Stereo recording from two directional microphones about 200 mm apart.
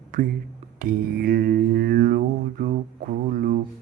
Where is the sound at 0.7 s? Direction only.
50° right (ahead or behind).